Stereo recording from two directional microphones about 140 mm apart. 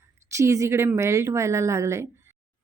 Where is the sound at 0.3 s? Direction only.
20° right (ahead or behind).